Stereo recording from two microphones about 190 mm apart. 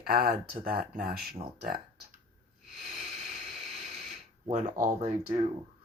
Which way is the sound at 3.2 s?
40° right (ahead or behind).